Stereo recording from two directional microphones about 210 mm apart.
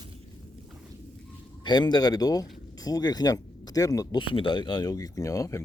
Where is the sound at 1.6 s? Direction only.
20° left (ahead or behind).